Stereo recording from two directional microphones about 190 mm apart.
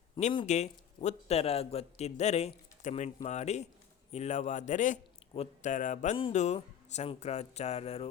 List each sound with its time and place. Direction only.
0.2 s speech: 35° left (ahead or behind)